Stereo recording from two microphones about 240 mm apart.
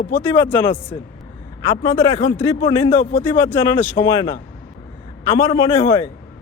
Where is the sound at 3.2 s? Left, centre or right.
Centre.